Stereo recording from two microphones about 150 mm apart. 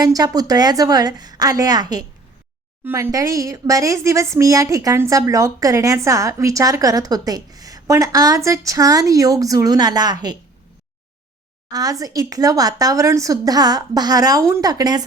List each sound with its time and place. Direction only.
0.0 s speech: 25° right (ahead or behind)
11.7 s speech: 25° right (ahead or behind)